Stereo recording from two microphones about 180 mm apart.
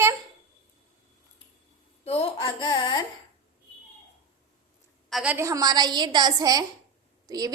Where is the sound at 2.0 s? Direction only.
30° left (ahead or behind).